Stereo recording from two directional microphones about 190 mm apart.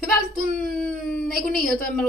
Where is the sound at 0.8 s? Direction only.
Centre (ahead or behind).